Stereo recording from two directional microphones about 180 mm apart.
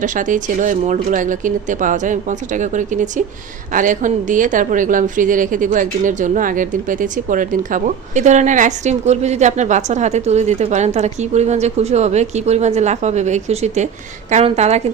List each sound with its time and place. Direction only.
0.0 s a woman's voice: 45° right (ahead or behind)